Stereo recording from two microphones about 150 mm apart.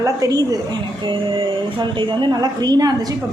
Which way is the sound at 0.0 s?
25° right (ahead or behind).